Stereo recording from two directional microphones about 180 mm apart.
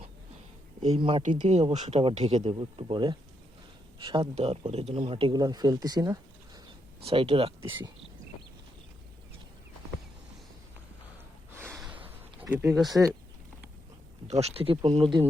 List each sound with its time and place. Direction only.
0.8 s speech: 35° right (ahead or behind)
7.0 s speech: 30° right (ahead or behind)
12.4 s speech: 10° right (ahead or behind)
14.3 s speech: 35° right (ahead or behind)